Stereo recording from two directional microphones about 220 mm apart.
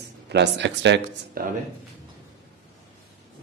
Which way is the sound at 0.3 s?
55° right (ahead or behind).